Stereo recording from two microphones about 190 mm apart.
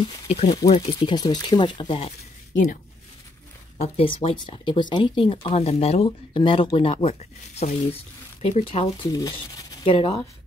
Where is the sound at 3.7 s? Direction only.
30° left (ahead or behind).